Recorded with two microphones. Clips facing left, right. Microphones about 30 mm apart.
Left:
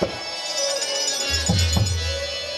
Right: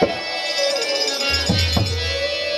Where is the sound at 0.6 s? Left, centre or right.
Right.